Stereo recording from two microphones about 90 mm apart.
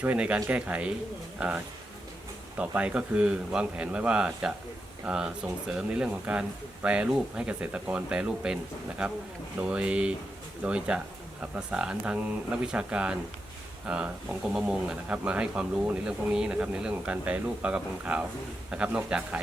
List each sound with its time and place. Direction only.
0.0 s speech: 15° right (ahead or behind)
9.6 s speech: 15° right (ahead or behind)